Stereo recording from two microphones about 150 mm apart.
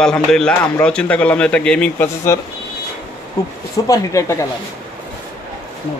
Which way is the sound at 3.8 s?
20° left (ahead or behind).